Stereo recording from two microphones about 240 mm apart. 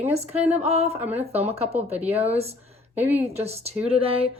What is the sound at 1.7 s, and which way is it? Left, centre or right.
Speech, centre.